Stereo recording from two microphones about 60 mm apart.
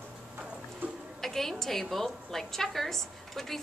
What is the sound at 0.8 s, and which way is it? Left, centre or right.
Music, right.